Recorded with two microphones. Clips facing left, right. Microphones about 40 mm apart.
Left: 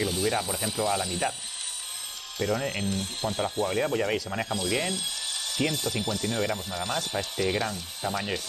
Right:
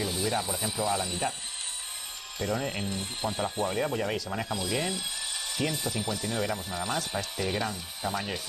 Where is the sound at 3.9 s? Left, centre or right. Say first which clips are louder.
Left 3 dB; centre.